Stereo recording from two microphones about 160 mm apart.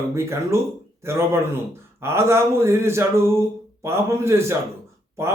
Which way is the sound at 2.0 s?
15° right (ahead or behind).